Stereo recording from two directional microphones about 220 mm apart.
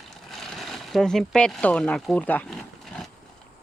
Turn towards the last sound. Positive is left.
turn(degrees=0)  # may be behind; listen again after turning